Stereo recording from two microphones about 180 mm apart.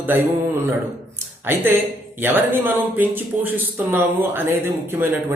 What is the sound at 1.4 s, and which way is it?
Speech, 15° right (ahead or behind).